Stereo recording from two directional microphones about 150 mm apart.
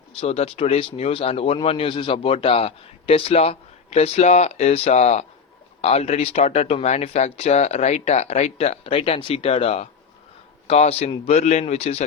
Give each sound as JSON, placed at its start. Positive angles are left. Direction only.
{"t": 0.2, "sound": "a man's voice", "side_deg": 40}